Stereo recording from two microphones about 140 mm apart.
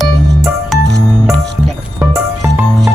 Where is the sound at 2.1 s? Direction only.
20° right (ahead or behind).